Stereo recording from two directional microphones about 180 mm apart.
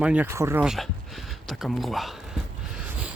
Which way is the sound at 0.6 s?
Centre (ahead or behind).